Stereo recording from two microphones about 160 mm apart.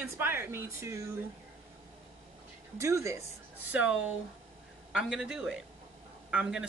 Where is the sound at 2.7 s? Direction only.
20° right (ahead or behind).